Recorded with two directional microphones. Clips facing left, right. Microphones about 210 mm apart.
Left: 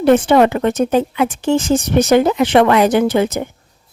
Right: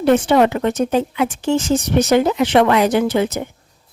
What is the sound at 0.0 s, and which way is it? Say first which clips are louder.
Speech: left 2 dB; 55° left (ahead or behind).